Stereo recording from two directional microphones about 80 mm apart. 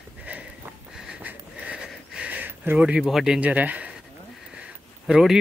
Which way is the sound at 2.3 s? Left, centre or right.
Right.